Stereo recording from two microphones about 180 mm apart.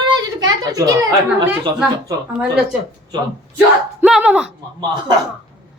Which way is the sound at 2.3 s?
5° right (ahead or behind).